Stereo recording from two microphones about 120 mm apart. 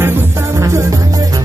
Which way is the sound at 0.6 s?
25° right (ahead or behind).